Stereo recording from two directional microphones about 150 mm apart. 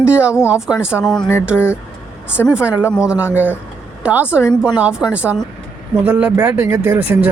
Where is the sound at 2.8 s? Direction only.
15° left (ahead or behind).